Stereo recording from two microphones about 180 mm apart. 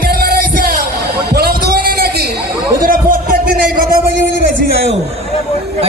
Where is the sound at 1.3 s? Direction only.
60° right (ahead or behind).